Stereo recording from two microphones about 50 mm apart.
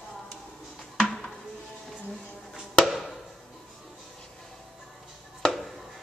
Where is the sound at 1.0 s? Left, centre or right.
Centre.